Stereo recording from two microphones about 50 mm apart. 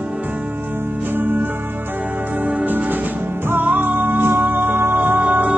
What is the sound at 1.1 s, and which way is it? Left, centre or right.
Music, right.